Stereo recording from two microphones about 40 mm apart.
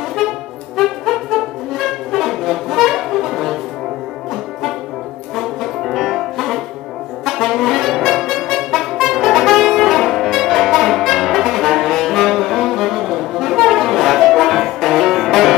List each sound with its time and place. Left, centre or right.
0.2 s music: centre
5.3 s music: centre
7.2 s brass instrument: centre